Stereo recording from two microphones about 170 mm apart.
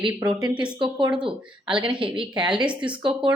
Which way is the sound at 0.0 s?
25° right (ahead or behind).